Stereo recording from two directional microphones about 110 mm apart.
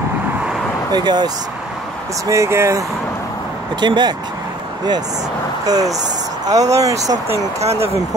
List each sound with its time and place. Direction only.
0.9 s speech: 40° right (ahead or behind)
2.2 s speech: 25° right (ahead or behind)
3.8 s speech: 40° right (ahead or behind)
5.7 s speech: 30° right (ahead or behind)